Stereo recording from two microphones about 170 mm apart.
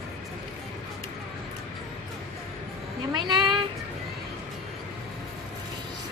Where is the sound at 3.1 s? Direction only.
25° right (ahead or behind).